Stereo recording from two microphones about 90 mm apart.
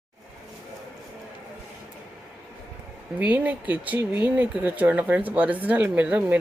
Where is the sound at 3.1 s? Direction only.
15° right (ahead or behind).